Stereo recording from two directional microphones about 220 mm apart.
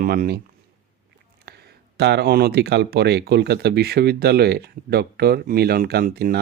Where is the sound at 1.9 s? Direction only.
50° right (ahead or behind).